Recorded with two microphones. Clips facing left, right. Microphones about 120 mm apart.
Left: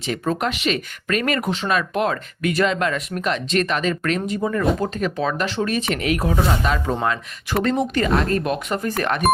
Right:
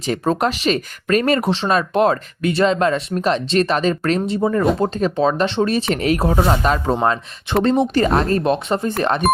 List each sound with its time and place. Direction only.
0.0 s speech: 35° right (ahead or behind)
7.5 s speech: 25° right (ahead or behind)